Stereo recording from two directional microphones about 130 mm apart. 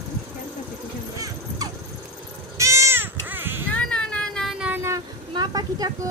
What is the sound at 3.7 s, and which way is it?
Child singing, 10° left (ahead or behind).